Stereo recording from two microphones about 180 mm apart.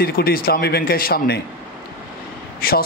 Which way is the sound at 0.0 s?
55° left (ahead or behind).